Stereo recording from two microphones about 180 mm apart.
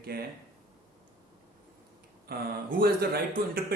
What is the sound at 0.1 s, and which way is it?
Speech, 60° right (ahead or behind).